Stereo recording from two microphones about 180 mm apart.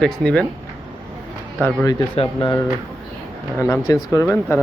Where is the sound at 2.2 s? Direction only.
25° left (ahead or behind).